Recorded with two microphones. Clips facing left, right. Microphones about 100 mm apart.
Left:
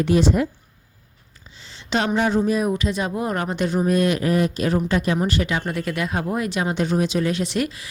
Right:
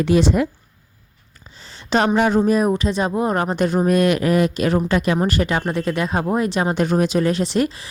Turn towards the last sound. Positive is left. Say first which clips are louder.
# right 4 dB
turn(degrees=-30)  # may be behind; listen again after turning